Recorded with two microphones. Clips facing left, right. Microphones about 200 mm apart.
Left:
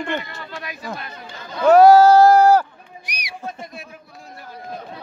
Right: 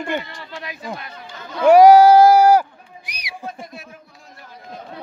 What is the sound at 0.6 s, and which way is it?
Speech, 25° right (ahead or behind).